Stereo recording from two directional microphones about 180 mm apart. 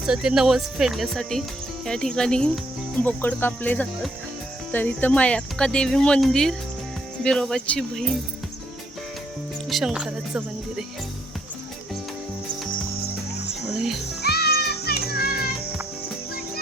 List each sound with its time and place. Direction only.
0.0 s speech: 5° right (ahead or behind)
9.6 s speech: centre (ahead or behind)
13.7 s a child's voice: centre (ahead or behind)
14.2 s music: 65° left (ahead or behind)